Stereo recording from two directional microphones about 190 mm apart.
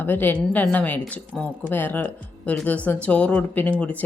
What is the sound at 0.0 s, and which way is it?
Speech, 10° left (ahead or behind).